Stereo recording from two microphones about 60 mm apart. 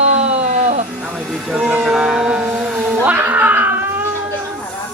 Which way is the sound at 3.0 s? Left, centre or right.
Right.